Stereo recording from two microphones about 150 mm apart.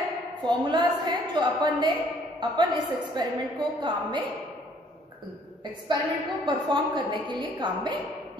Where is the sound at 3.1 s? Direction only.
30° right (ahead or behind).